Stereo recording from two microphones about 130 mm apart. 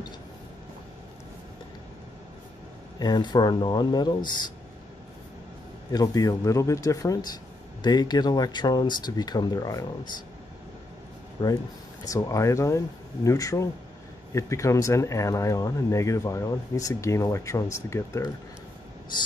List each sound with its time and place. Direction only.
3.0 s speech: 35° left (ahead or behind)
5.9 s speech: 30° left (ahead or behind)
11.4 s speech: 40° left (ahead or behind)
12.0 s speech: 25° left (ahead or behind)